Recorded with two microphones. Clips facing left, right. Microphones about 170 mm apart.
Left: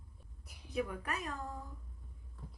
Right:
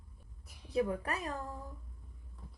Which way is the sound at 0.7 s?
30° right (ahead or behind).